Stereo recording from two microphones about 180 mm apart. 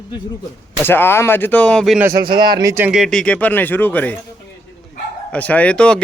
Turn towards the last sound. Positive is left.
turn(degrees=5)  # may be behind; listen again after turning